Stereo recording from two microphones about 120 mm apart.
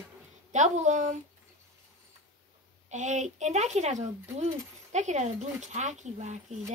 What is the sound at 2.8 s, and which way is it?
Speech, 85° right.